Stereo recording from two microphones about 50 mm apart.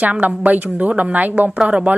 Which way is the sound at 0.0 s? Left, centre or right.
Right.